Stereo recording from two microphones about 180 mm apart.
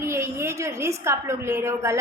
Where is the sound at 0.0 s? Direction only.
15° right (ahead or behind).